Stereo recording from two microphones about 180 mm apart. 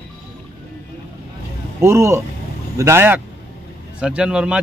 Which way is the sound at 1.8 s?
15° right (ahead or behind).